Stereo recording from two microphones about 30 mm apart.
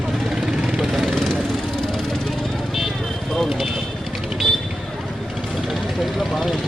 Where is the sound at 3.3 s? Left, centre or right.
Centre.